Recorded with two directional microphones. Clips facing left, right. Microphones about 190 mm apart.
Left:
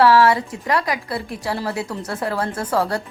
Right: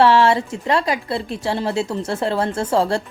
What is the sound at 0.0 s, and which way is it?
Speech, 25° right (ahead or behind).